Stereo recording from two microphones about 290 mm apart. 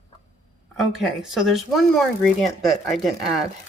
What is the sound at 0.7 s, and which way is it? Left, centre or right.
Speech, centre.